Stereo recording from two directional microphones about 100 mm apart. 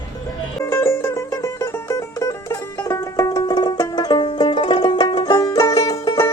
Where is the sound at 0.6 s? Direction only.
25° left (ahead or behind).